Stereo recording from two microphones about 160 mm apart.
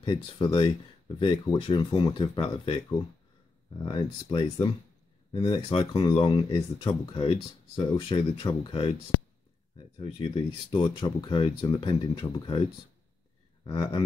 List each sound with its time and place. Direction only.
0.0 s speech: 30° left (ahead or behind)
9.9 s speech: 35° left (ahead or behind)
13.7 s speech: 25° left (ahead or behind)